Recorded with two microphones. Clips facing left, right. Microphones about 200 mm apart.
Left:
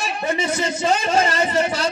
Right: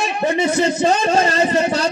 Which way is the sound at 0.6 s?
35° right (ahead or behind).